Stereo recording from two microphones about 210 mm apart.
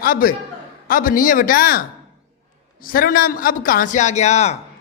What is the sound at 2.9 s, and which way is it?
A man's voice, 45° left (ahead or behind).